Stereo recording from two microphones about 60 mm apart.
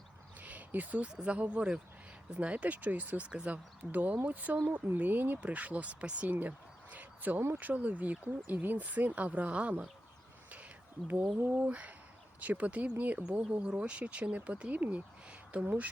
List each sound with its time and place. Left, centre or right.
0.3 s a sound: right
1.1 s speech: centre
11.3 s speech: right